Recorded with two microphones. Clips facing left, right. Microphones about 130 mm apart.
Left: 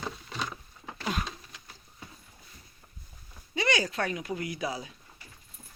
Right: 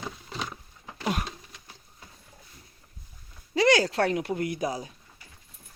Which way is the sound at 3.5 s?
90° right.